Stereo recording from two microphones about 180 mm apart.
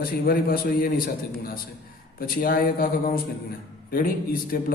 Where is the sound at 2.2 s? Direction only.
50° left (ahead or behind).